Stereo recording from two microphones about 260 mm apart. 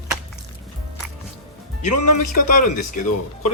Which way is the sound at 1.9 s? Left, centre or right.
Left.